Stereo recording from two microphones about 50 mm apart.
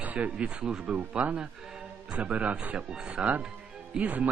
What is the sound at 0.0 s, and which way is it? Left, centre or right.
Speech, right.